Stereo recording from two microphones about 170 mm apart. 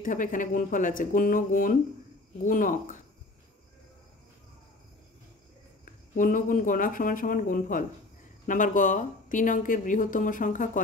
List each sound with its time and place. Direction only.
0.0 s speech: 50° left (ahead or behind)
6.1 s speech: 50° left (ahead or behind)